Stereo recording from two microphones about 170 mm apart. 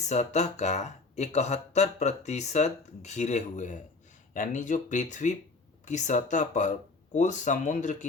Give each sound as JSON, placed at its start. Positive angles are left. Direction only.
{"t": 0.0, "sound": "speech", "side_deg": 40}